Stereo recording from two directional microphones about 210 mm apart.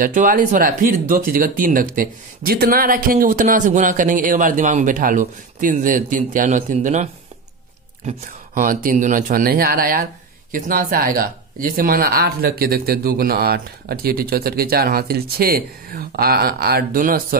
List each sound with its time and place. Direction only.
0.0 s speech: 40° right (ahead or behind)